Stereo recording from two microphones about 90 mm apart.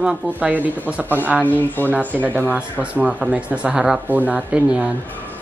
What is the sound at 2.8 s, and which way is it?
Speech, 15° right (ahead or behind).